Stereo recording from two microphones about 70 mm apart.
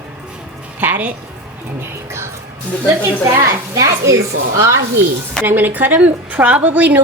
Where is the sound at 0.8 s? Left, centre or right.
Right.